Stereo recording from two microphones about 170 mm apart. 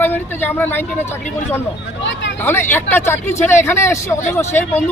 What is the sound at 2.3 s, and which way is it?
Speech, 15° left (ahead or behind).